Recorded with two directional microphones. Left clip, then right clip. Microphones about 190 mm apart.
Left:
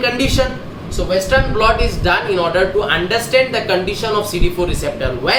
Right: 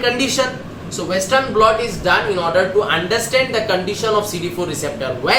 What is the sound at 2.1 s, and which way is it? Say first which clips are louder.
Speech: even; 20° left (ahead or behind).